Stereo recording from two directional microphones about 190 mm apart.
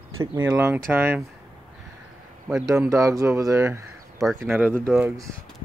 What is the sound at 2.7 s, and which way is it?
Speech, 15° right (ahead or behind).